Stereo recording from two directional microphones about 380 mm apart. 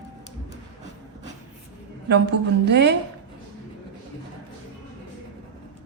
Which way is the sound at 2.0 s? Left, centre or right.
Right.